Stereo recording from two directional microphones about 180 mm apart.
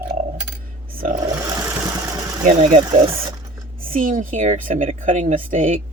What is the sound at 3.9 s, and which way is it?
Speech, 50° right (ahead or behind).